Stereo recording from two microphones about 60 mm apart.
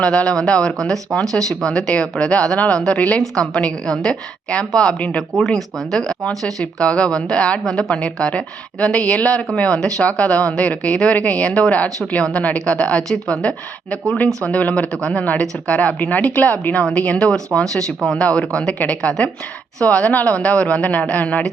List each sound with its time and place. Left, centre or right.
0.0 s speech: centre
5.4 s speech: centre
7.6 s a woman's voice: centre
13.0 s speech: centre
14.4 s a woman's voice: left; by 18.2 s centre
18.2 s a woman's voice: centre
18.8 s a woman's voice: left